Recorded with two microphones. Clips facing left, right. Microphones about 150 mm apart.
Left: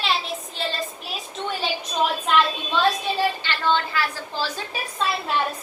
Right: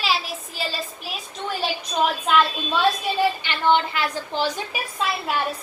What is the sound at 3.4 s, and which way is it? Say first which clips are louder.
A woman's voice: right 3 dB; 15° right (ahead or behind).